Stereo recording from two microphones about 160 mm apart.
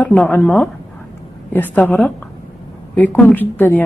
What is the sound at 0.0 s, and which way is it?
A woman's voice, 10° left (ahead or behind).